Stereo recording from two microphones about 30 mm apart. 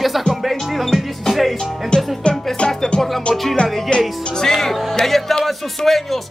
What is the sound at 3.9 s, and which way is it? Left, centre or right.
Speech, left.